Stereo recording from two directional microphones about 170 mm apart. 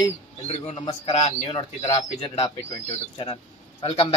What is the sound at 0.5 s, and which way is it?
A man's voice, 40° left (ahead or behind).